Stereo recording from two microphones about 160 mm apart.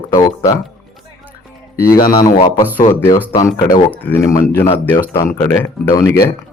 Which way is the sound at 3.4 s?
20° left (ahead or behind).